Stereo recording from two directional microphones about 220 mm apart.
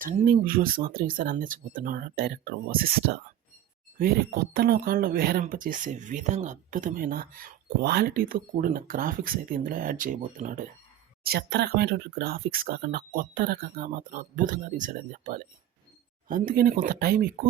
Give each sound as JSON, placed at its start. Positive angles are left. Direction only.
{"t": 0.0, "sound": "speech", "side_deg": -40}
{"t": 3.9, "sound": "speech", "side_deg": -45}